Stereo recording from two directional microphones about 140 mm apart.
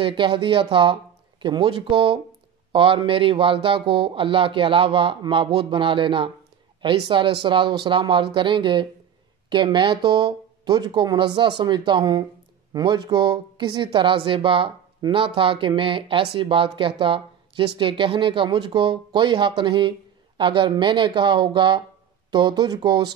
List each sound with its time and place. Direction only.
0.0 s a woman's voice: 35° right (ahead or behind)